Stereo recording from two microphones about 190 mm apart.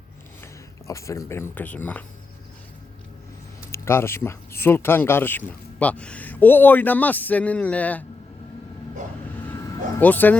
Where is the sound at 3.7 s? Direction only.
15° left (ahead or behind).